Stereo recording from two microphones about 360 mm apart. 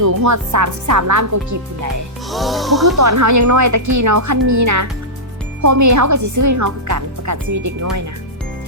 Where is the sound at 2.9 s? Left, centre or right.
Right.